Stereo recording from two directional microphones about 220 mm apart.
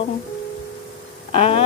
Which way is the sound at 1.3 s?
25° left (ahead or behind).